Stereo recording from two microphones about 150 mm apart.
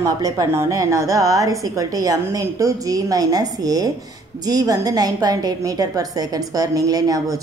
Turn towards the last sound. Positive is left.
turn(degrees=-25)  # may be behind; listen again after turning